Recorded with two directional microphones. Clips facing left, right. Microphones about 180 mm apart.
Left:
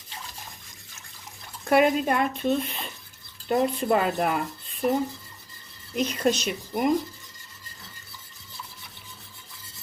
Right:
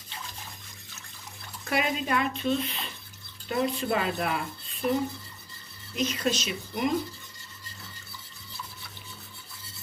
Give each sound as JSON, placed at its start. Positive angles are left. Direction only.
{"t": 1.7, "sound": "speech", "side_deg": 50}
{"t": 6.0, "sound": "speech", "side_deg": 55}